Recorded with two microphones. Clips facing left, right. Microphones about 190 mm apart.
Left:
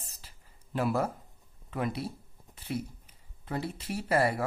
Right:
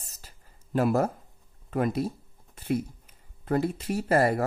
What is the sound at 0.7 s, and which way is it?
Speech, 45° right (ahead or behind).